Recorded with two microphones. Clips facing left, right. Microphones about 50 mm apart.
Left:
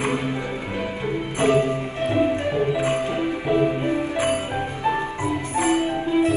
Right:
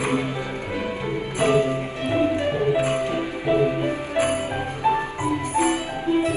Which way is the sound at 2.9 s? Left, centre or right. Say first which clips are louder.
Left 1 dB; left.